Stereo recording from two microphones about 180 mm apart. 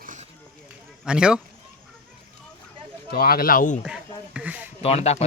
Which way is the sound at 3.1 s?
55° left (ahead or behind).